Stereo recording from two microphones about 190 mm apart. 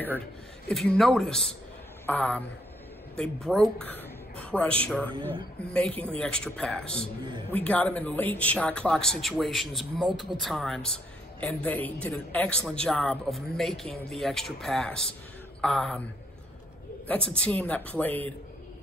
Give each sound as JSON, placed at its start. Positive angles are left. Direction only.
{"t": 0.7, "sound": "a man's voice", "side_deg": 0}
{"t": 17.1, "sound": "speech", "side_deg": 5}